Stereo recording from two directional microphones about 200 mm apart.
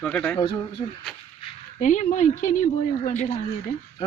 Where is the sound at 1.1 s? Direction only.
Centre (ahead or behind).